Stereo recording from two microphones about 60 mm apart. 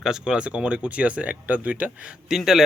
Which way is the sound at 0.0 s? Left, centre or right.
Centre.